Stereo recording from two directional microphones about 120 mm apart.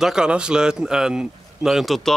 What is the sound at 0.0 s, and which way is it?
A man's voice, 5° right (ahead or behind).